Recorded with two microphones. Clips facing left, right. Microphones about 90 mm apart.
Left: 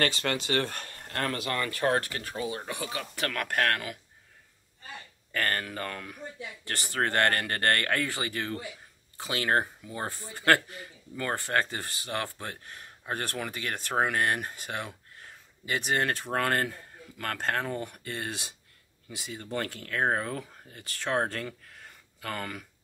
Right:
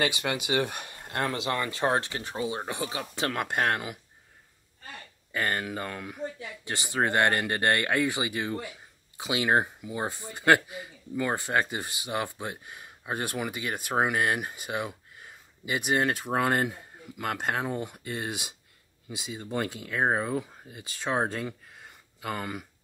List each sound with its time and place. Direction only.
0.0 s speech: 15° right (ahead or behind)
5.3 s speech: 15° right (ahead or behind)